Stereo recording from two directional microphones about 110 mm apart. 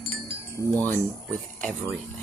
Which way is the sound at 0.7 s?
15° left (ahead or behind).